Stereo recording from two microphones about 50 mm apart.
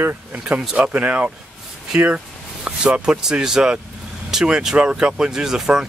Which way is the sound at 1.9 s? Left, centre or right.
Right.